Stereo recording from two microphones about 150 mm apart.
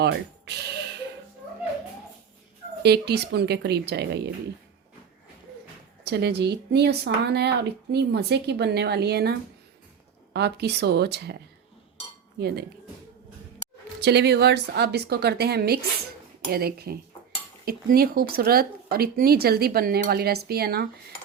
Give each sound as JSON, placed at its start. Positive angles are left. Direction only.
{"t": 0.0, "sound": "speech", "side_deg": -90}
{"t": 2.8, "sound": "speech", "side_deg": -90}
{"t": 6.1, "sound": "speech", "side_deg": -90}
{"t": 10.3, "sound": "speech", "side_deg": -90}
{"t": 12.4, "sound": "speech", "side_deg": -90}
{"t": 14.0, "sound": "speech", "side_deg": -90}